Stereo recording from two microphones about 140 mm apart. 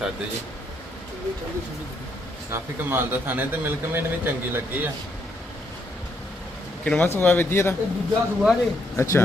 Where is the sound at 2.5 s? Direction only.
15° right (ahead or behind).